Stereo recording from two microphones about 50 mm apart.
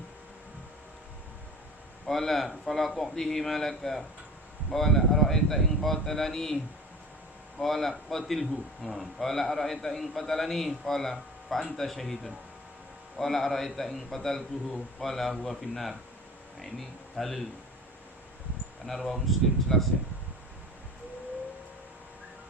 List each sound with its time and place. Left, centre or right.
2.0 s speech: centre
7.6 s speech: centre
17.2 s speech: centre
18.9 s speech: centre